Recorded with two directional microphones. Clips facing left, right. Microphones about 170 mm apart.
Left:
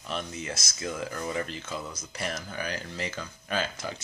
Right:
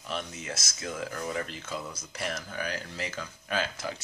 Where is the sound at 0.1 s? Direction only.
Centre (ahead or behind).